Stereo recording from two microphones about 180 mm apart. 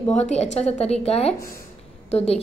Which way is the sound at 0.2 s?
35° left (ahead or behind).